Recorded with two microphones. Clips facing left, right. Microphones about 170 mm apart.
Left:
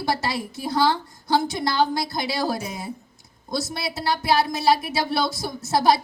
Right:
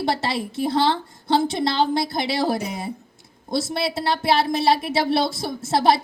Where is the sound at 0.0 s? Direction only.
25° right (ahead or behind).